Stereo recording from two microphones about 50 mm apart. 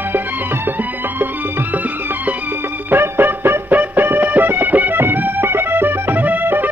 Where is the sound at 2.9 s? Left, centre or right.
Right.